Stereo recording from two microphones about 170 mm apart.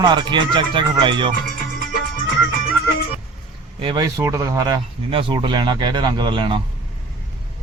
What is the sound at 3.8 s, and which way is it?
Speech, 25° right (ahead or behind).